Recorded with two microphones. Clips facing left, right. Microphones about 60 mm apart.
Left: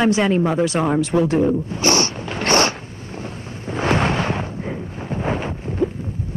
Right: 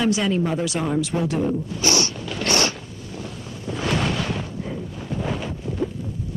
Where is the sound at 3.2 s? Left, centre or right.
Left.